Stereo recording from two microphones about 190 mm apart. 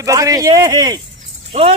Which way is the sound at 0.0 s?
15° right (ahead or behind).